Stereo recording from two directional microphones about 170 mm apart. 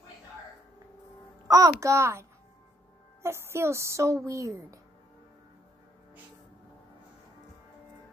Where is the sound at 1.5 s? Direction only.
20° right (ahead or behind).